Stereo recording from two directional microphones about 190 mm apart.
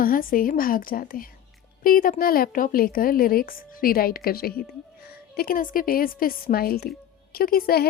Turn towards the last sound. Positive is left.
turn(degrees=50)  # may be behind; listen again after turning